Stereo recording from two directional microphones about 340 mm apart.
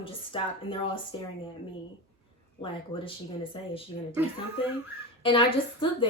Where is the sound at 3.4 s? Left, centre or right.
Centre.